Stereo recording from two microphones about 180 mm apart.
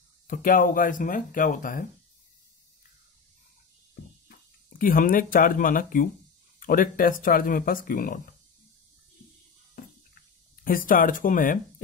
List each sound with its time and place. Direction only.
0.3 s speech: 50° left (ahead or behind)
4.3 s speech: 50° left (ahead or behind)
10.6 s speech: 50° left (ahead or behind)